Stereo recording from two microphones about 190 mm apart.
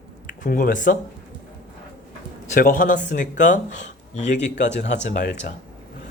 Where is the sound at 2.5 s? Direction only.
45° left (ahead or behind).